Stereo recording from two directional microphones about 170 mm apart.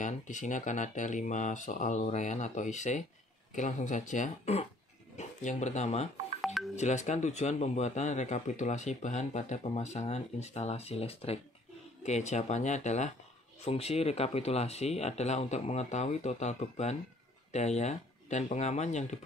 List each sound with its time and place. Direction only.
0.0 s speech: 45° left (ahead or behind)
6.4 s music: centre (ahead or behind)
6.8 s speech: 45° left (ahead or behind)